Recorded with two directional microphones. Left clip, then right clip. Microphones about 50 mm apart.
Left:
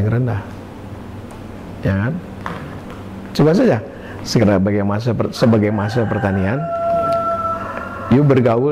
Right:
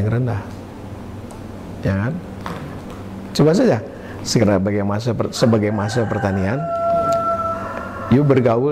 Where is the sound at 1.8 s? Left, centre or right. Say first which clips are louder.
Left 2 dB; left.